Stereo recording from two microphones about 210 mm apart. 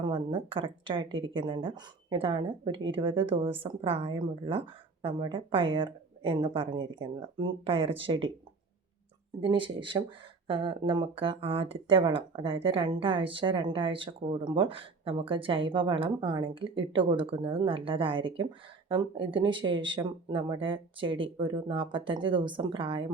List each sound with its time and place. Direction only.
0.0 s speech: 25° right (ahead or behind)
9.4 s speech: 25° right (ahead or behind)